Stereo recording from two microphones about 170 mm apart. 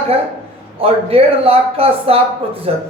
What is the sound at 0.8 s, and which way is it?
Speech, 35° right (ahead or behind).